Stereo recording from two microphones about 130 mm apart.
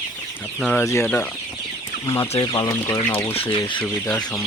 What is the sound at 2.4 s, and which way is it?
Speech, 30° left (ahead or behind).